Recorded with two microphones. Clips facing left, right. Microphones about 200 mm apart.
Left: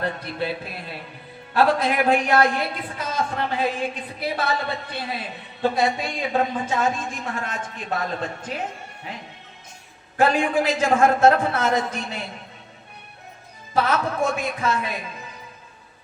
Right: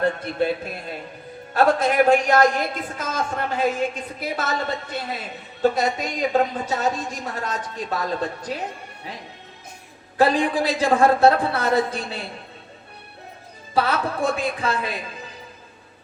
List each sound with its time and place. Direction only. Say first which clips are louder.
0.0 s a woman's voice: right 5 dB; 45° right (ahead or behind)
10.2 s a man's voice: right 1 dB; 35° right (ahead or behind)
13.7 s a man's voice: even; 35° right (ahead or behind)